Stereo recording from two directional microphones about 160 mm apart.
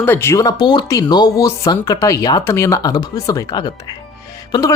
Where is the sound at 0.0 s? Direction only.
15° left (ahead or behind).